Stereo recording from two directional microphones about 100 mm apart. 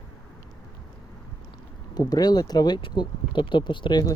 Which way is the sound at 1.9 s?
40° left (ahead or behind).